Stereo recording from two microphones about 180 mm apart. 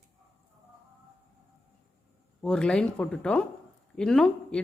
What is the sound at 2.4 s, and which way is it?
Speech, 5° left (ahead or behind).